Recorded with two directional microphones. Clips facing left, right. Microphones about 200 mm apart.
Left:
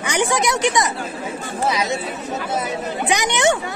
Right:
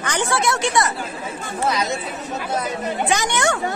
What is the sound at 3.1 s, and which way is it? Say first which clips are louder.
Speech: left 4 dB; 20° left (ahead or behind).